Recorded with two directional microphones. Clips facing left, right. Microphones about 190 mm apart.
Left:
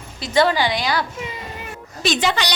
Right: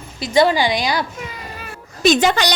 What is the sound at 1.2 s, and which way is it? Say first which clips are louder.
Child singing: left 1 dB; 25° left (ahead or behind).